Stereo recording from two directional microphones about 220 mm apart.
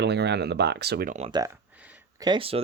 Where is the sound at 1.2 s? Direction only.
25° right (ahead or behind).